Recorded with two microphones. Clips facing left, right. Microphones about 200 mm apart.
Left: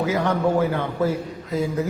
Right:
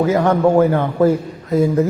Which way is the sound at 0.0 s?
50° right (ahead or behind).